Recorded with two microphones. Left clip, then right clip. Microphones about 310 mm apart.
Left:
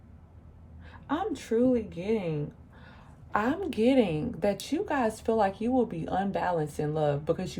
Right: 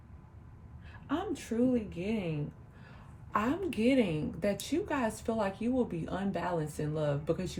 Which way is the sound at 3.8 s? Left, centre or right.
Left.